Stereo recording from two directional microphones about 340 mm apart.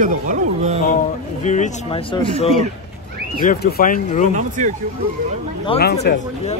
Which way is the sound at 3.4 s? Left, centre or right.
Left.